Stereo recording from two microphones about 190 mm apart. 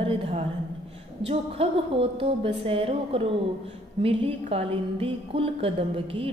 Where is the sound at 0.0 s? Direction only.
30° right (ahead or behind).